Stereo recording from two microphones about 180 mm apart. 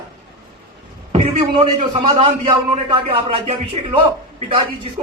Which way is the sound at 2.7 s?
35° right (ahead or behind).